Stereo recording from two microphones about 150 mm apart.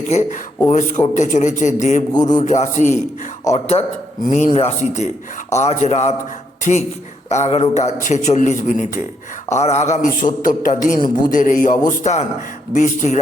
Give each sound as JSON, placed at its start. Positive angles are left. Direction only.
{"t": 0.1, "sound": "a man's voice", "side_deg": 50}
{"t": 2.1, "sound": "a sound", "side_deg": 25}
{"t": 2.4, "sound": "a man's voice", "side_deg": 50}
{"t": 9.5, "sound": "a man's voice", "side_deg": 50}
{"t": 10.2, "sound": "a man's voice", "side_deg": 60}